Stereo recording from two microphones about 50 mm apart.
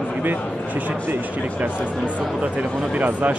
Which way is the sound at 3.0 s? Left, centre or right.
Right.